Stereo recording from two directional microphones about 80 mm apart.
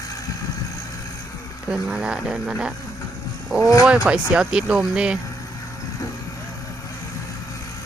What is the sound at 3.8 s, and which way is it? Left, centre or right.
Speech, centre.